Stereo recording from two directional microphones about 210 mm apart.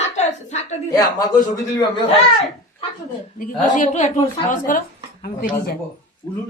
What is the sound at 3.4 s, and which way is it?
A woman's voice, 35° left (ahead or behind).